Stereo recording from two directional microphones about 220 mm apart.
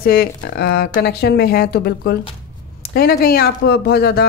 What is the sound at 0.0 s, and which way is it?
Speech, 45° left (ahead or behind).